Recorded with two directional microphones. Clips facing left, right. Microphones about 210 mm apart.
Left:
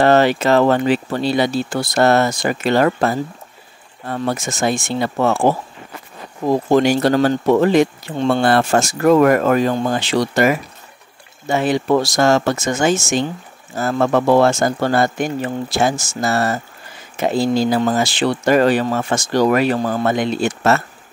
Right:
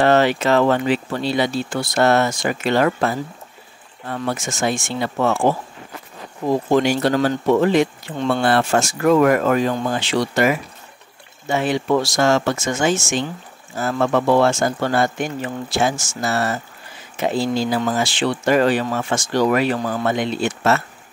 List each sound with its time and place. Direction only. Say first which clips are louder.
0.0 s speech: left 2 dB; 40° left (ahead or behind)
6.7 s speech: left 3 dB; 40° left (ahead or behind)